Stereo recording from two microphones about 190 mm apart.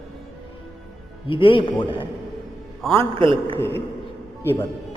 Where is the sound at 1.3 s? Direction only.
25° left (ahead or behind).